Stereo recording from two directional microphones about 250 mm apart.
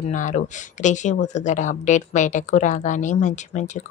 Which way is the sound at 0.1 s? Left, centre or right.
Left.